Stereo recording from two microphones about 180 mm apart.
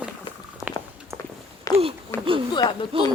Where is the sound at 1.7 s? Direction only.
20° left (ahead or behind).